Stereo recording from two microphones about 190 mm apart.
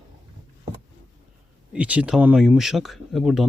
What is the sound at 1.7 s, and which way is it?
Speech, 5° right (ahead or behind).